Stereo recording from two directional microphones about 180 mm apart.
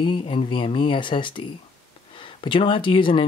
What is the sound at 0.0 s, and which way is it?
Speech, 30° left (ahead or behind).